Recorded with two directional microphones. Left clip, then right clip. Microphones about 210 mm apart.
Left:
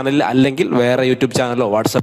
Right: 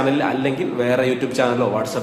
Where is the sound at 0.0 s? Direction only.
50° left (ahead or behind).